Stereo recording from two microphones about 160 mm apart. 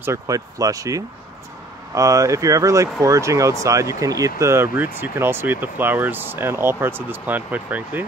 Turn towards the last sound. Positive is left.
turn(degrees=-10)  # may be behind; listen again after turning